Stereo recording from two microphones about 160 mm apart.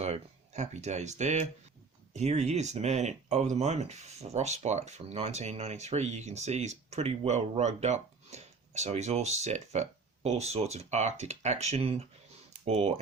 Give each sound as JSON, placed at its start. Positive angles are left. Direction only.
{"t": 0.0, "sound": "speech", "side_deg": -45}